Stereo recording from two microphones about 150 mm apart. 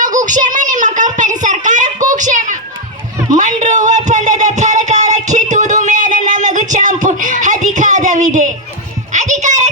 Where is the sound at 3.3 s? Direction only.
55° right (ahead or behind).